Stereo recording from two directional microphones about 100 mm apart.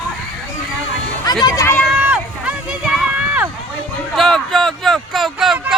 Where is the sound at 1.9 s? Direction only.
15° right (ahead or behind).